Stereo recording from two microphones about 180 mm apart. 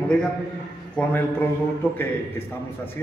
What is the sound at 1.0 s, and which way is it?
A man's voice, 5° left (ahead or behind).